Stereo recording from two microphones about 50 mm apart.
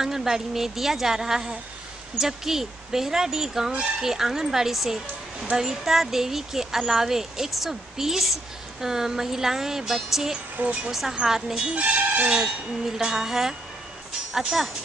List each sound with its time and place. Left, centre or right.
0.0 s speech: centre
10.6 s speech: right
10.9 s a woman's voice: centre
11.7 s speech: right
12.3 s speech: centre